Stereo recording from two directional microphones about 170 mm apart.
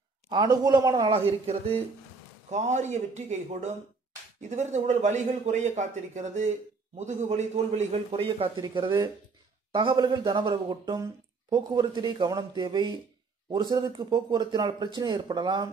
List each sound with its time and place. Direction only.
0.3 s speech: 25° right (ahead or behind)
1.4 s a man's voice: 35° right (ahead or behind)